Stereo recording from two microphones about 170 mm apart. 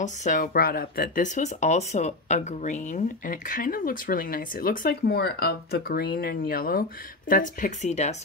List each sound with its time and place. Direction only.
0.0 s speech: 45° left (ahead or behind)